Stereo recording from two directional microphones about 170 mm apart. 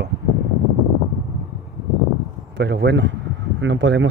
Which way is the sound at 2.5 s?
90° right.